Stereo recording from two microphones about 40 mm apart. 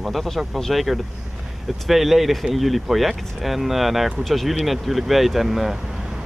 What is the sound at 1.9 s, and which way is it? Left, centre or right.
Speech, centre.